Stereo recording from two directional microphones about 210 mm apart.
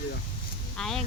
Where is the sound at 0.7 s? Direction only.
Centre (ahead or behind).